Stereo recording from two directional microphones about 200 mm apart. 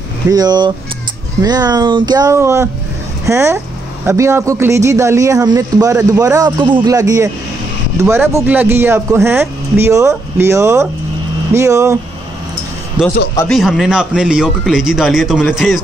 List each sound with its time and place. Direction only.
0.3 s a man's voice: 20° right (ahead or behind); by 15.8 s centre (ahead or behind)